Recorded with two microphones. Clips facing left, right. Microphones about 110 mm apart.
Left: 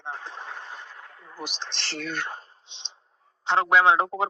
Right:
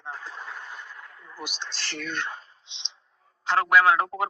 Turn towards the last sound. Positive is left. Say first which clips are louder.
# left 1 dB
turn(degrees=20)  # may be behind; listen again after turning